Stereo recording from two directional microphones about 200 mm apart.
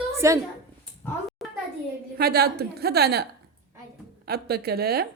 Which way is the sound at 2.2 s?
50° right (ahead or behind).